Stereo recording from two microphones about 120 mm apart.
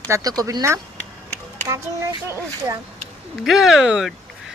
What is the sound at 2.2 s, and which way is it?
Speech, 25° right (ahead or behind).